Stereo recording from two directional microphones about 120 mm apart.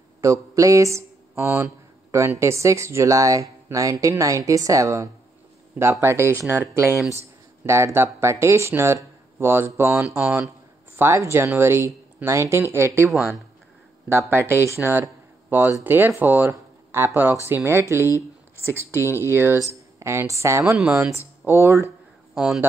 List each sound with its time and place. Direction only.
0.2 s speech: 25° right (ahead or behind)
13.1 s speech: centre (ahead or behind)
14.0 s speech: 20° right (ahead or behind)
20.7 s speech: 10° right (ahead or behind)
22.3 s speech: 5° right (ahead or behind)